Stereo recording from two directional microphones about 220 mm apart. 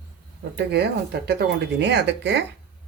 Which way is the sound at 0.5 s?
50° right (ahead or behind).